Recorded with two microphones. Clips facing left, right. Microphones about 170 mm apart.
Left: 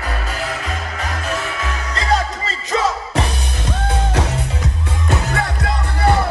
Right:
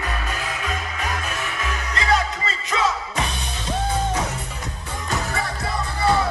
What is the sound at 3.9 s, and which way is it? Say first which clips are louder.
Music: left 4 dB; 80° left.